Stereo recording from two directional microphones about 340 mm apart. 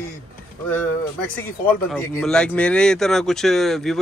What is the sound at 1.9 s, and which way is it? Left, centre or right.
Speech, centre.